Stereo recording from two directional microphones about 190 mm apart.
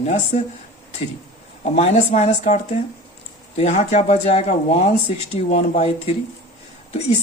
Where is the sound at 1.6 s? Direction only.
35° left (ahead or behind).